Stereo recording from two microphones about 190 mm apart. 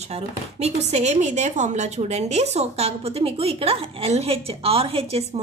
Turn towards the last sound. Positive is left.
turn(degrees=-30)  # may be behind; listen again after turning